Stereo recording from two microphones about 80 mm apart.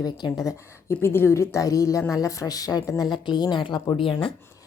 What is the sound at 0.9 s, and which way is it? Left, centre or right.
A woman's voice, left.